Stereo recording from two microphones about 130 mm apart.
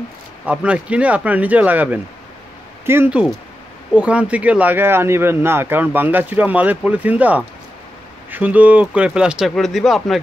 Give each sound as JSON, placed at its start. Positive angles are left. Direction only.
{"t": 0.5, "sound": "speech", "side_deg": -10}